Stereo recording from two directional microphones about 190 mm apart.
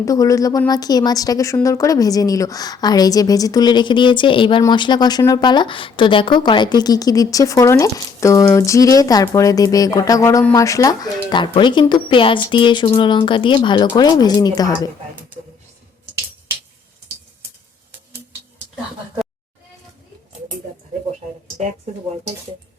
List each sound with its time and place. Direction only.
0.0 s a woman's voice: 15° left (ahead or behind)